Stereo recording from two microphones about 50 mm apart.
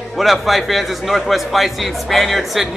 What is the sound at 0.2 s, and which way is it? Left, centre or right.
A man's voice, centre.